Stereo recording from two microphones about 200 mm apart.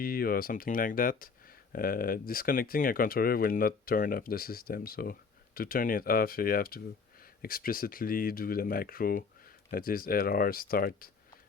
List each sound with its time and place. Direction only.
0.0 s speech: 50° left (ahead or behind)